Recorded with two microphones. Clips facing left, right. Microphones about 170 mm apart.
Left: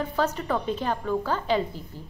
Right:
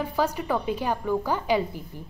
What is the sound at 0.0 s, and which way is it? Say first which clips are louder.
A woman's voice: even; 10° right (ahead or behind).